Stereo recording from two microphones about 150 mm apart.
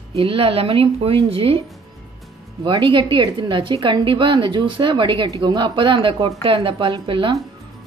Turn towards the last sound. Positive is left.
turn(degrees=-35)  # may be behind; listen again after turning